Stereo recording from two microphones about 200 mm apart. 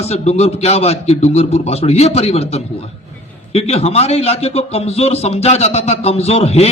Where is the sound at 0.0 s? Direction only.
30° left (ahead or behind).